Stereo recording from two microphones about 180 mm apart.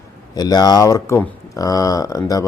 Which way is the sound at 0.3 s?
20° left (ahead or behind).